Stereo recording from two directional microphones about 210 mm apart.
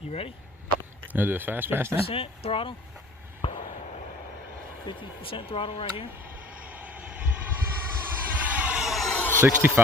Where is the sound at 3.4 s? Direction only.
25° left (ahead or behind).